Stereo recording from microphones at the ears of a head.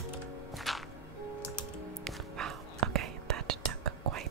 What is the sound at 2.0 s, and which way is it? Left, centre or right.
Whispering, right.